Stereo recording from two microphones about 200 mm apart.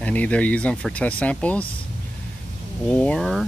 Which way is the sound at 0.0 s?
5° left (ahead or behind).